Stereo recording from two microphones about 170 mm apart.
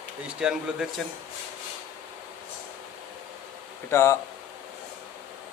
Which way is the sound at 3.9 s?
15° left (ahead or behind).